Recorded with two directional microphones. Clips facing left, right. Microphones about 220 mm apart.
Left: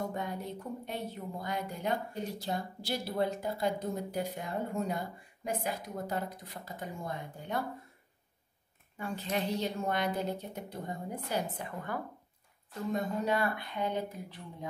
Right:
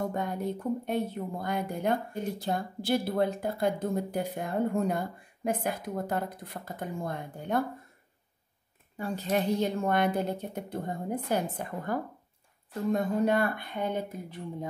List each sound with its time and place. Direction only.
0.1 s a woman's voice: 50° right (ahead or behind)
8.9 s a woman's voice: 35° right (ahead or behind)
9.3 s a woman's voice: 55° right (ahead or behind)
12.9 s a woman's voice: 55° right (ahead or behind)